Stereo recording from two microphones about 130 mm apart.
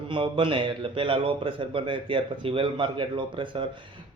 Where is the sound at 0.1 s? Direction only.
40° right (ahead or behind).